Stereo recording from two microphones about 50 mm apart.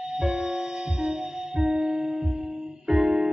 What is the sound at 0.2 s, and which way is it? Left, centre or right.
Music, centre.